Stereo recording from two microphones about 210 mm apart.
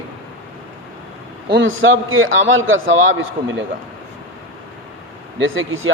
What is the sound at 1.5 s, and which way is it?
A man's voice, 65° right (ahead or behind).